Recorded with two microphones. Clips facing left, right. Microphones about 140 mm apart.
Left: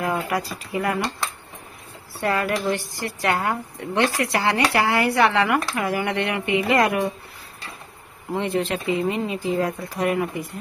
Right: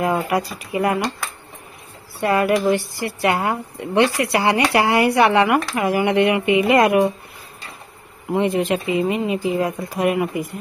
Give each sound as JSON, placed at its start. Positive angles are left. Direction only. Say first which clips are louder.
{"t": 0.0, "sound": "speech", "louder": "right 4 dB", "side_deg": -20}
{"t": 2.1, "sound": "speech", "louder": "right 5 dB", "side_deg": -10}
{"t": 8.3, "sound": "speech", "louder": "right 5 dB", "side_deg": -15}